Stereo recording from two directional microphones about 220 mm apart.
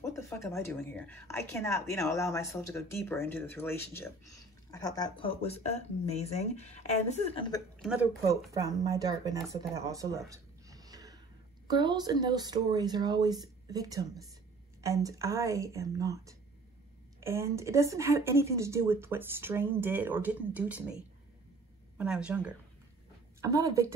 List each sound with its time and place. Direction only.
0.0 s a woman's voice: 15° left (ahead or behind); by 7.5 s 30° left (ahead or behind)
7.8 s speech: centre (ahead or behind)
8.5 s a woman's voice: 15° right (ahead or behind)